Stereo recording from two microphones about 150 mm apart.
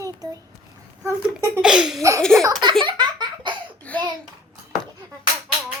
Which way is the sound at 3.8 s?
10° left (ahead or behind).